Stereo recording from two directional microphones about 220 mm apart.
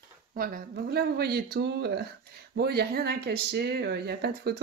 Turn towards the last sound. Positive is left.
turn(degrees=-45)  # may be behind; listen again after turning